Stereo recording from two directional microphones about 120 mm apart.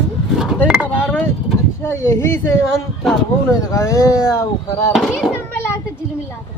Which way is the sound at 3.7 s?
25° left (ahead or behind).